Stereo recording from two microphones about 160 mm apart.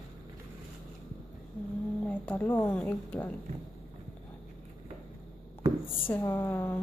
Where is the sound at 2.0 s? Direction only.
10° left (ahead or behind).